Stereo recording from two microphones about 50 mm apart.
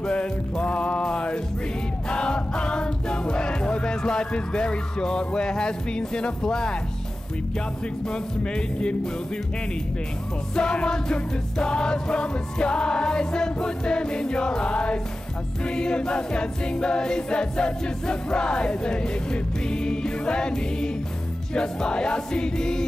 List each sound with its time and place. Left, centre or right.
0.0 s music: left
2.0 s choir: centre
8.1 s music: centre
10.5 s music: centre
15.6 s choir: centre